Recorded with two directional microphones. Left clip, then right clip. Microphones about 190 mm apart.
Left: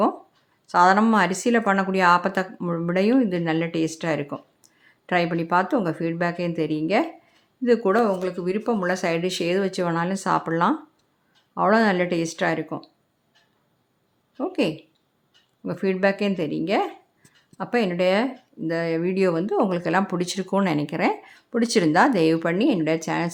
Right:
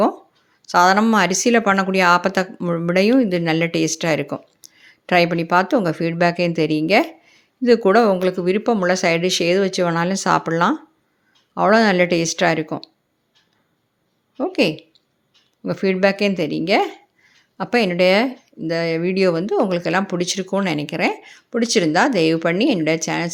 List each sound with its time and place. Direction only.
0.7 s a woman's voice: 15° right (ahead or behind)
14.3 s a woman's voice: 15° right (ahead or behind)